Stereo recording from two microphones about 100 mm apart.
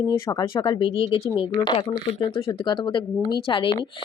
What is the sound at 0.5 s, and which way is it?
Speech, 50° left (ahead or behind).